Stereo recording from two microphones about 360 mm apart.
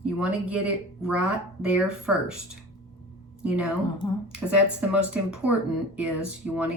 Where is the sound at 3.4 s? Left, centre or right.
Centre.